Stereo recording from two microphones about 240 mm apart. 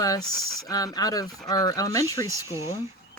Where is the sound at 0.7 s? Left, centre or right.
Centre.